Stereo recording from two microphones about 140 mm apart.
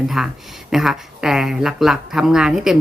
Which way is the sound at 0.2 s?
5° right (ahead or behind).